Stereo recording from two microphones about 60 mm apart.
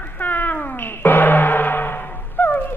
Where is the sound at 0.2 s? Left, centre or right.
Left.